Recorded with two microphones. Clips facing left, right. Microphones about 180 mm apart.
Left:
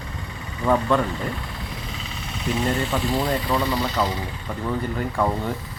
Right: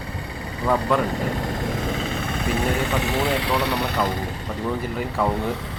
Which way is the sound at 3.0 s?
75° right (ahead or behind).